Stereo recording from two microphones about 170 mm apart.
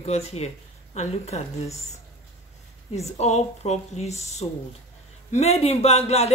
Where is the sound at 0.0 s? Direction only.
40° left (ahead or behind).